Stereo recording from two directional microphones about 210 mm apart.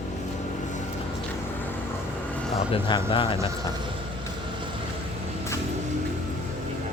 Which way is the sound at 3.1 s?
25° left (ahead or behind).